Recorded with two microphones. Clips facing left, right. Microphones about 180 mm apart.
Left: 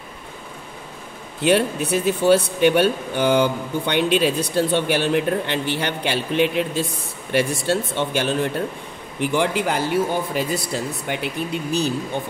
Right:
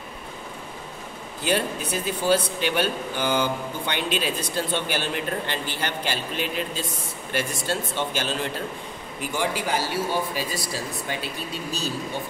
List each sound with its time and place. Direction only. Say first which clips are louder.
1.4 s a man's voice: left 7 dB; 65° left (ahead or behind)